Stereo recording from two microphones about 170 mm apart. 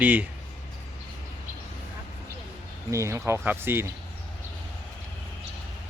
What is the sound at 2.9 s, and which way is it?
Speech, 15° right (ahead or behind).